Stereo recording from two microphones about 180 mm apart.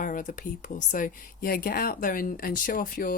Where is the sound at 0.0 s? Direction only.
45° left (ahead or behind).